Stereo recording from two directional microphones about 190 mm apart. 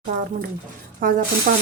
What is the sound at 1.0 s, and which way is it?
Speech, 50° right (ahead or behind).